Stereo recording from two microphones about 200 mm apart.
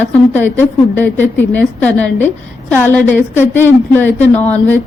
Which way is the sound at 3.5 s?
10° left (ahead or behind).